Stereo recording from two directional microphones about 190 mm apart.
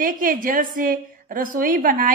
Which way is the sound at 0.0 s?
45° right (ahead or behind).